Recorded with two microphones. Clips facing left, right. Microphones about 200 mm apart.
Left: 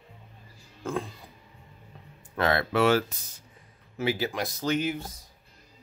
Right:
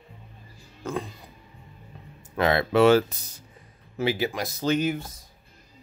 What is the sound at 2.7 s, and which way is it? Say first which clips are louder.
Speech: right 7 dB; 25° right (ahead or behind).